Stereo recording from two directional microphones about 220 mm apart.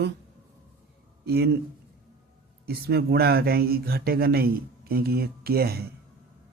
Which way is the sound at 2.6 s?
45° right (ahead or behind).